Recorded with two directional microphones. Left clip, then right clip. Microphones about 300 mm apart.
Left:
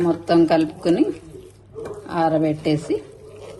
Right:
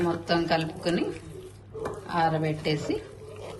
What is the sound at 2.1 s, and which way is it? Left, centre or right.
Speech, centre.